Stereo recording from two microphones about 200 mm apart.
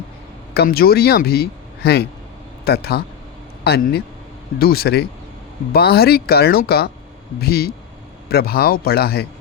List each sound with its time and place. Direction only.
0.5 s a man's voice: 50° left (ahead or behind)